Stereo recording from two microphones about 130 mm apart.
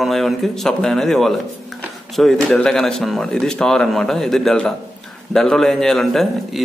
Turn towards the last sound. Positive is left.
turn(degrees=0)  # may be behind; listen again after turning